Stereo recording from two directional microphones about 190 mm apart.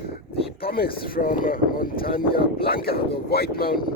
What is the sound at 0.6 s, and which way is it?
Speech, 55° left (ahead or behind).